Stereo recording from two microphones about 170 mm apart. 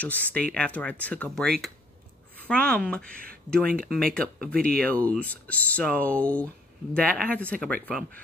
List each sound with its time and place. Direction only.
0.0 s speech: 10° left (ahead or behind)
3.9 s speech: 5° left (ahead or behind)